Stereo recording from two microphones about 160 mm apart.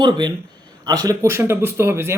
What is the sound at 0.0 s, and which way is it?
A man's voice, 25° right (ahead or behind).